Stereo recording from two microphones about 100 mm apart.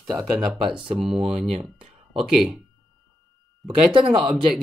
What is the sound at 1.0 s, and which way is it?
Speech, 70° right (ahead or behind).